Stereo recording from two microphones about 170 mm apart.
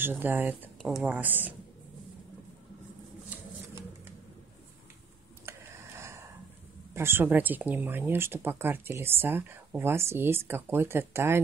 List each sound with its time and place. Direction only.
0.0 s speech: 10° right (ahead or behind)
5.4 s a sound: 15° right (ahead or behind)
6.9 s speech: 15° right (ahead or behind)